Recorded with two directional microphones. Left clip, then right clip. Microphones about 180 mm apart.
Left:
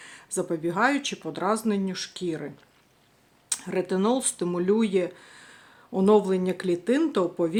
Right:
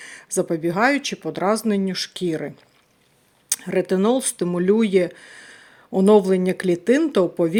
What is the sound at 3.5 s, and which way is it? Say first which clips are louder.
Speech: right 6 dB; 35° right (ahead or behind).